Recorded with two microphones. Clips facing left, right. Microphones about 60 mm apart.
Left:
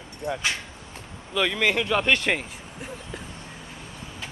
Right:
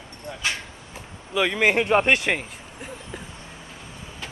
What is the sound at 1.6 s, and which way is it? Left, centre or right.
Speech, right.